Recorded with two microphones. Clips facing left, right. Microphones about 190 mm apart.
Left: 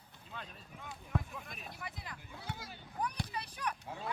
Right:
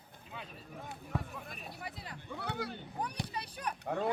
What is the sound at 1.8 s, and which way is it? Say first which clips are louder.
Speech: right 1 dB; 30° right (ahead or behind).